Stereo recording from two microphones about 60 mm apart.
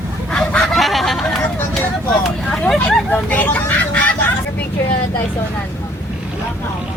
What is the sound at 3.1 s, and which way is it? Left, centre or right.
Speech, left.